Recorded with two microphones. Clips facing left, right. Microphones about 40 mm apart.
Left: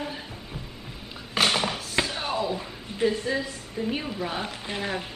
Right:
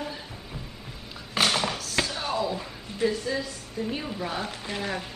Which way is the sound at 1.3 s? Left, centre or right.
Centre.